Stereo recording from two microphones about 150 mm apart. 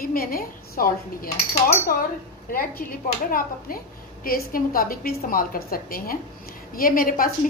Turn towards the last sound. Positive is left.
turn(degrees=70)  # may be behind; listen again after turning